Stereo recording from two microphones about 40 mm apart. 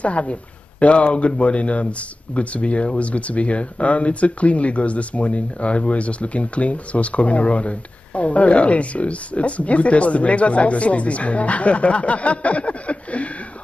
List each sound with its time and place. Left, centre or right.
0.0 s speech: left